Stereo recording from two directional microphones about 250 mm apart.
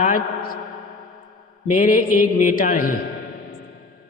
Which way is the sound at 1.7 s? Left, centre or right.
Left.